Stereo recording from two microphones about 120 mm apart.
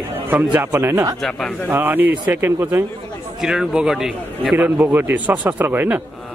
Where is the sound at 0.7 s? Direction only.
25° right (ahead or behind).